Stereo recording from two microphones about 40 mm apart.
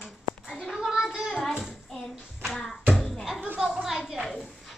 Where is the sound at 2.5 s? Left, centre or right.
Centre.